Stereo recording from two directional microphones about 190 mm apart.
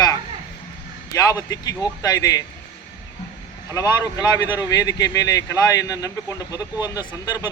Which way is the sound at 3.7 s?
20° left (ahead or behind).